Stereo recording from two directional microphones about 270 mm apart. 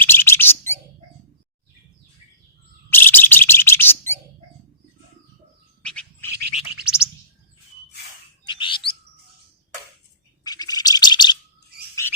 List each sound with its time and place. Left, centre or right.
0.0 s bird: centre
2.9 s bird: centre
5.8 s bird: centre
8.4 s bird: centre
10.4 s bird: centre